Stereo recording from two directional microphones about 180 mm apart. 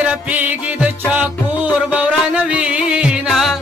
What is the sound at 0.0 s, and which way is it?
Music, 10° right (ahead or behind).